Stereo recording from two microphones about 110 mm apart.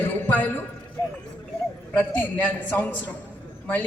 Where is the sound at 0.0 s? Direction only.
15° left (ahead or behind).